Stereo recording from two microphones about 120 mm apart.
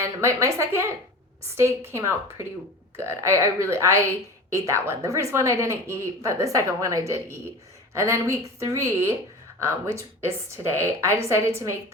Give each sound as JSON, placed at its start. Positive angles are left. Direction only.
{"t": 0.0, "sound": "speech", "side_deg": -25}